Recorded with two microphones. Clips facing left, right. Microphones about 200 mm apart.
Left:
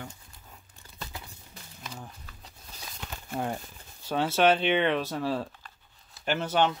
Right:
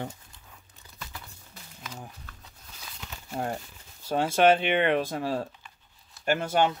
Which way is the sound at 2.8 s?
50° left (ahead or behind).